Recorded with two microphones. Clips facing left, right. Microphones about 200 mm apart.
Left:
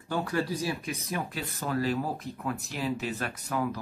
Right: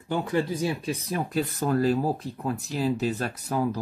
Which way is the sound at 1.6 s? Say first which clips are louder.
Right 5 dB; 45° right (ahead or behind).